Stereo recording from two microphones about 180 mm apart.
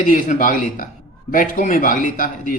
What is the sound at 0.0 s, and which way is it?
A man's voice, 45° left (ahead or behind).